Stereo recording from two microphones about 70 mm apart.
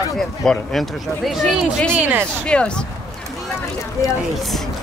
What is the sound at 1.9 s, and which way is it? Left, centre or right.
Speech, right.